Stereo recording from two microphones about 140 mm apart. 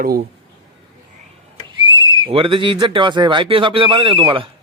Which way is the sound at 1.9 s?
35° right (ahead or behind).